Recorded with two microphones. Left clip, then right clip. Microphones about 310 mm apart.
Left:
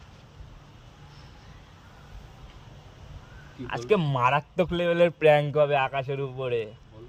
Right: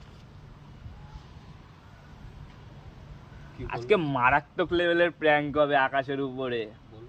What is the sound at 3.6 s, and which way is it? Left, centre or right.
Speech, left.